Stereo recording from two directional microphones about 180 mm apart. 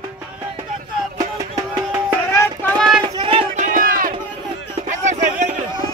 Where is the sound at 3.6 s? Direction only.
50° right (ahead or behind).